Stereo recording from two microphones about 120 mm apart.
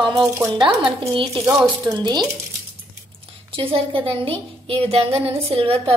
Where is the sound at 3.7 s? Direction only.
50° right (ahead or behind).